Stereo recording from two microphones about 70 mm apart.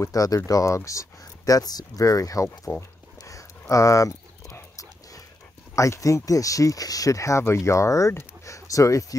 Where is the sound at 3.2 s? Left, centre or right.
Left.